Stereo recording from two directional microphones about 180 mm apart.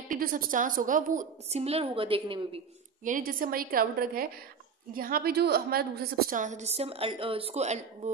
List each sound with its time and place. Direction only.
0.1 s a woman's voice: 50° right (ahead or behind); by 2.6 s 30° right (ahead or behind)
3.0 s a woman's voice: 50° right (ahead or behind)